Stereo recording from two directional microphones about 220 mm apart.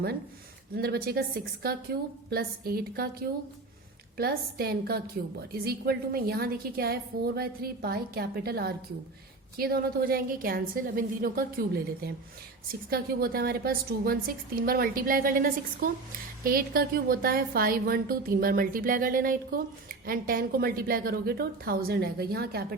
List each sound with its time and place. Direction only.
0.8 s a woman's voice: 45° right (ahead or behind)